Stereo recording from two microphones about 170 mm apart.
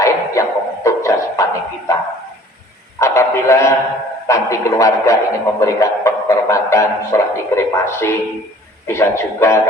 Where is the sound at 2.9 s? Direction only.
15° left (ahead or behind).